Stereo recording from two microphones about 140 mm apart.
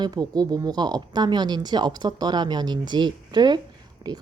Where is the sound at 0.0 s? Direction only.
30° right (ahead or behind).